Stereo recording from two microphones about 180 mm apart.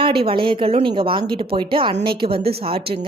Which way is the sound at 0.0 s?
30° right (ahead or behind).